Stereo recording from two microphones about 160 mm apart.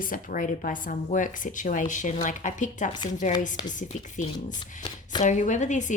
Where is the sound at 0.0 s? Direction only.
60° left (ahead or behind).